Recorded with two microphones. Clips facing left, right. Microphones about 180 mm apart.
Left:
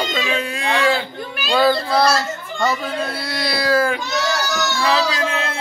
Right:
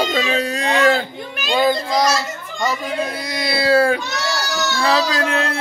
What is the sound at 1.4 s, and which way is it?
A child's voice, 20° right (ahead or behind).